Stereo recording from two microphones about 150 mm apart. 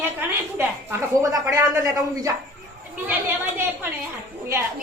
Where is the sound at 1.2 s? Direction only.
20° right (ahead or behind).